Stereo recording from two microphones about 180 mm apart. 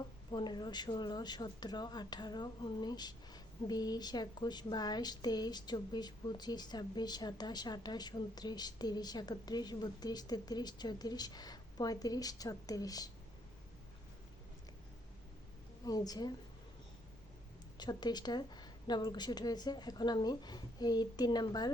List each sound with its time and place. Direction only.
0.3 s speech: 25° left (ahead or behind)
15.8 s speech: 20° left (ahead or behind)
17.7 s speech: 25° left (ahead or behind)